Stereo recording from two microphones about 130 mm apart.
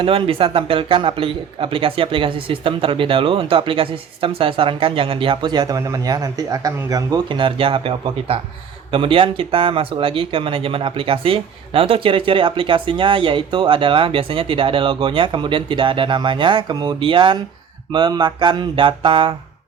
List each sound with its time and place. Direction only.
0.0 s speech: 45° right (ahead or behind)